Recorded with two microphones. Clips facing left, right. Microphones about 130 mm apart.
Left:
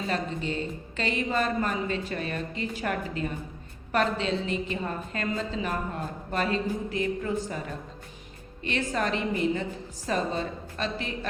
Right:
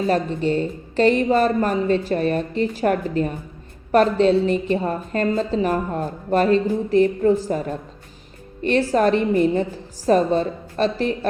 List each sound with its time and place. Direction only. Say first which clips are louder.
0.1 s a woman's voice: right 9 dB; 40° right (ahead or behind)